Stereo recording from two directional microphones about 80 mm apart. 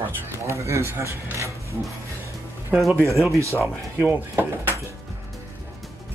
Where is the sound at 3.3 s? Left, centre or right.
Right.